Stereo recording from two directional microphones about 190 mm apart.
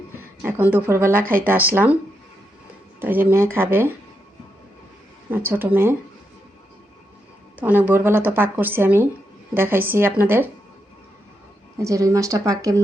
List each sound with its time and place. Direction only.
0.4 s a woman's voice: 10° right (ahead or behind)
3.0 s a woman's voice: 10° right (ahead or behind)
5.5 s a woman's voice: 10° right (ahead or behind)
7.6 s a woman's voice: 10° right (ahead or behind)
11.8 s a woman's voice: 15° right (ahead or behind)